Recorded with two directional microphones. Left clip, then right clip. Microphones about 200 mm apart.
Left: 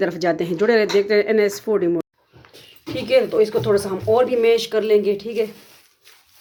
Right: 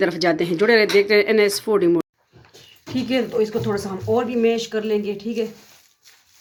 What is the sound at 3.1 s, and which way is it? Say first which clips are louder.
Speech: left 5 dB; 35° left (ahead or behind).